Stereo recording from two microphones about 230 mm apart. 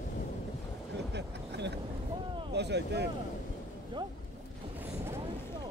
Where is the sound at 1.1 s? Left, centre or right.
Right.